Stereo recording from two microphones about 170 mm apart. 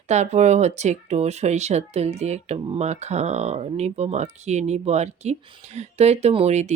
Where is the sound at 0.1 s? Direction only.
40° right (ahead or behind).